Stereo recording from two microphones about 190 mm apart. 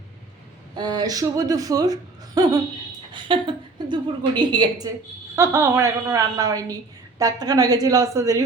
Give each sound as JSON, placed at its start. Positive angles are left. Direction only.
{"t": 0.8, "sound": "speech", "side_deg": -20}
{"t": 3.8, "sound": "a sound", "side_deg": -25}
{"t": 4.4, "sound": "a woman's voice", "side_deg": -25}